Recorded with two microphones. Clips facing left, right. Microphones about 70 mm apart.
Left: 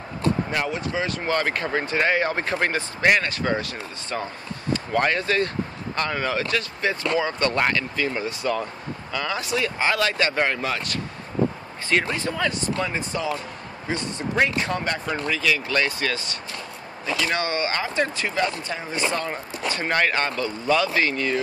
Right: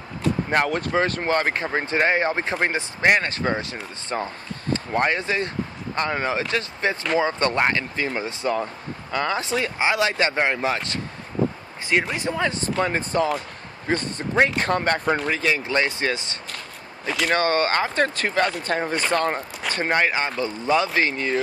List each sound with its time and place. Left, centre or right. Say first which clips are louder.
0.5 s speech: right 4 dB; right
9.8 s speech: right 2 dB; centre
17.0 s speech: right 3 dB; right
19.9 s speech: right 1 dB; centre